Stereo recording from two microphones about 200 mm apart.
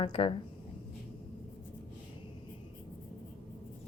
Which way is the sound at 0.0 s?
25° left (ahead or behind).